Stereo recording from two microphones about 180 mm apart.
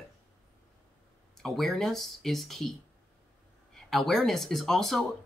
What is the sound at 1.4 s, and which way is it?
Speech, centre (ahead or behind).